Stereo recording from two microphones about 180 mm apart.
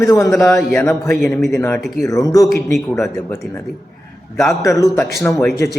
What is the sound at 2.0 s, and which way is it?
Speech, 20° left (ahead or behind).